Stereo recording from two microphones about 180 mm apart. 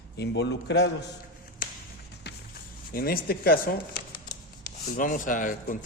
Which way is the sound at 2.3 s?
65° left (ahead or behind).